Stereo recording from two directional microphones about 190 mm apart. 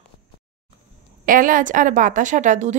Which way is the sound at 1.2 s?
45° right (ahead or behind).